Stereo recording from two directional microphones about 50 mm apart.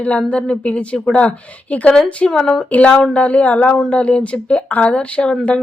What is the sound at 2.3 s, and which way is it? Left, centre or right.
Speech, centre.